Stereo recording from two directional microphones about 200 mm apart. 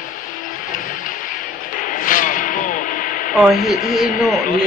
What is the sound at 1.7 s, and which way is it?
Radio, 40° left (ahead or behind).